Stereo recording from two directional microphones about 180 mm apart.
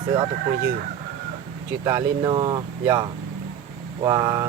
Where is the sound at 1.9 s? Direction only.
20° right (ahead or behind).